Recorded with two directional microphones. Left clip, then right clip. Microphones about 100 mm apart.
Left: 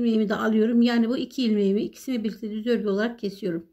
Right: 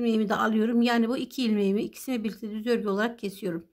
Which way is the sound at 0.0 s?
40° right (ahead or behind).